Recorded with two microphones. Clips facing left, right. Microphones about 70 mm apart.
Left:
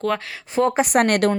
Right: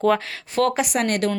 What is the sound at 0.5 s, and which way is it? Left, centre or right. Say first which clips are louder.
Speech: left 1 dB; left.